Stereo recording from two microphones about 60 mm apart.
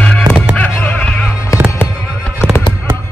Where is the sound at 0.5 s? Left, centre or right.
Left.